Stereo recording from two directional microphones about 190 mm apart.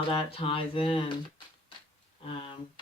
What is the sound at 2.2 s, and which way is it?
Speech, 30° left (ahead or behind).